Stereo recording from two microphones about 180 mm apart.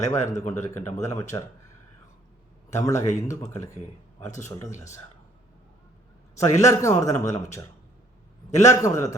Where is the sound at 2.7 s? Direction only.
15° left (ahead or behind).